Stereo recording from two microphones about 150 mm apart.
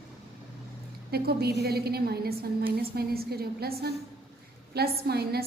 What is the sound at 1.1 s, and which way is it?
A woman's voice, 90° right.